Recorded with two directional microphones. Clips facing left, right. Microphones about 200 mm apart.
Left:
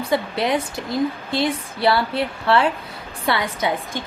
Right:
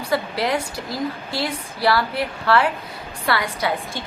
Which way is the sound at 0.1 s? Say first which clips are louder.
Left 1 dB; 20° left (ahead or behind).